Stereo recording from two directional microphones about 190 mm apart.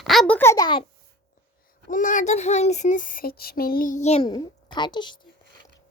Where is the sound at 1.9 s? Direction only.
45° left (ahead or behind).